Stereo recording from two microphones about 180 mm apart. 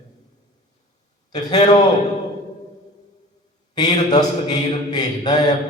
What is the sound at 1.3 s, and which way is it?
Speech, 25° left (ahead or behind).